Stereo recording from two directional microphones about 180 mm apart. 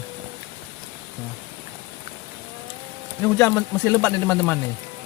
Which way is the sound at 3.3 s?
15° left (ahead or behind).